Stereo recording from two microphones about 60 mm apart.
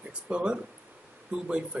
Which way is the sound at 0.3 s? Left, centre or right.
Centre.